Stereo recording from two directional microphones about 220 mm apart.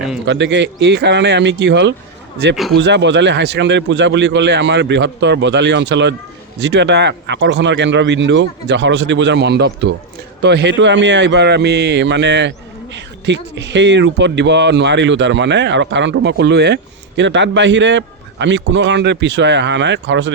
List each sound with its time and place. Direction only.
0.3 s a man's voice: 55° right (ahead or behind)